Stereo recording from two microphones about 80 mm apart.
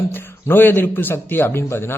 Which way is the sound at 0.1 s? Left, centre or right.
Left.